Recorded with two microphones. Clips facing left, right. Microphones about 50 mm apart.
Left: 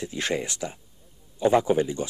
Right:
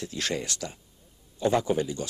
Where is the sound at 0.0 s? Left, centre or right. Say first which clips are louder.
Left 3 dB; left.